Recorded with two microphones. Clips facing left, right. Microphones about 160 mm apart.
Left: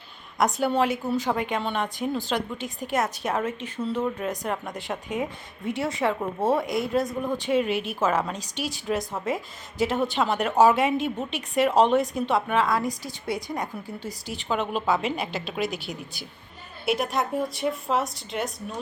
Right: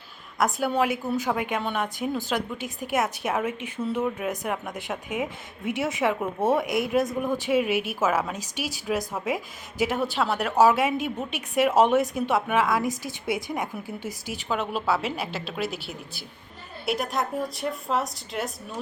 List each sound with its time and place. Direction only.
0.6 s a woman's voice: 10° right (ahead or behind)
6.7 s a man's voice: 20° right (ahead or behind)
7.0 s a woman's voice: centre (ahead or behind)